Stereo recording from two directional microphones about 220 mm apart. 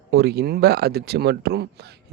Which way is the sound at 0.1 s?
45° right (ahead or behind).